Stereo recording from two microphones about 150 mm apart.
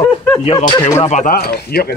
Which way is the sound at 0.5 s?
40° left (ahead or behind).